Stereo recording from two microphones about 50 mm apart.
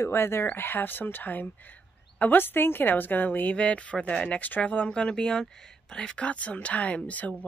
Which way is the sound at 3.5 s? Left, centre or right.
Left.